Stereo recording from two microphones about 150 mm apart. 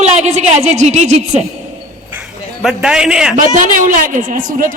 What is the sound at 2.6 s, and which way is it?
Speech, 5° right (ahead or behind).